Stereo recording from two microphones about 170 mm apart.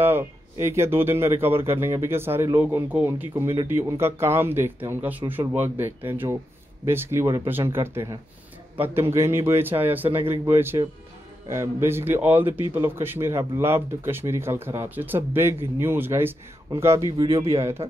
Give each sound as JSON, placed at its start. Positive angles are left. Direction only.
{"t": 0.0, "sound": "speech", "side_deg": -15}